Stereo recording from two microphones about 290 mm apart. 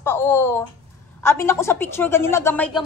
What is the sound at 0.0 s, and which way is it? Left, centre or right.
A woman's voice, centre.